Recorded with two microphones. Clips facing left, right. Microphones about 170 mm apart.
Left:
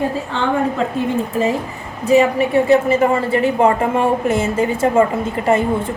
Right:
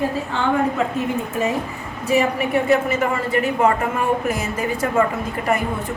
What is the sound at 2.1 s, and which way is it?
A woman's voice, 30° left (ahead or behind).